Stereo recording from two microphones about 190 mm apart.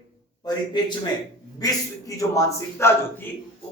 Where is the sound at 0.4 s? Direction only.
20° left (ahead or behind).